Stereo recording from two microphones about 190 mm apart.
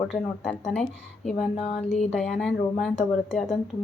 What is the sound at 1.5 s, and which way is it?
Speech, 30° left (ahead or behind).